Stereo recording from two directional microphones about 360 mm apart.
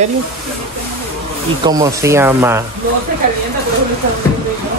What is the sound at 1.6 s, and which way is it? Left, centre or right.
Speech, centre.